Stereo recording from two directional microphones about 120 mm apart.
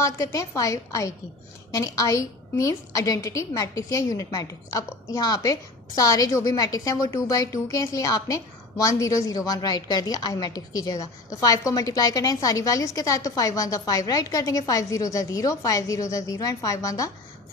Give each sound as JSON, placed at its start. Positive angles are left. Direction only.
{"t": 0.0, "sound": "a woman's voice", "side_deg": 25}